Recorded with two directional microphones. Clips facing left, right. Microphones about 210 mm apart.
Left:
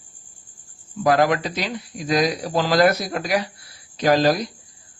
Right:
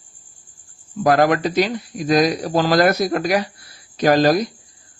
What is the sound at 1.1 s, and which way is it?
Speech, 50° right (ahead or behind).